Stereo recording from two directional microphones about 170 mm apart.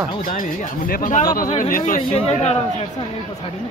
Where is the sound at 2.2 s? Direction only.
40° left (ahead or behind).